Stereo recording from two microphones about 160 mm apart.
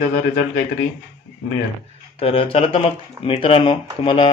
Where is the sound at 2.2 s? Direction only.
35° left (ahead or behind).